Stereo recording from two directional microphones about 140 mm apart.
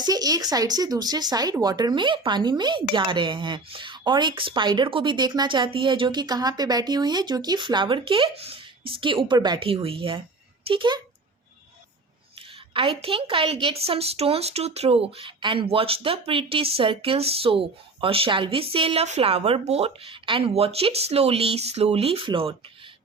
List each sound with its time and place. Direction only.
0.0 s speech: 30° right (ahead or behind)
12.7 s a woman's voice: 40° right (ahead or behind)